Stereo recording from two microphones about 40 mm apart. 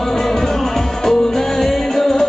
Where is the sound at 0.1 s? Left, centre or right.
Centre.